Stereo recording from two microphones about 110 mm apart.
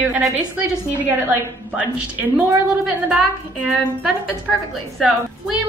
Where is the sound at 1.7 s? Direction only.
15° right (ahead or behind).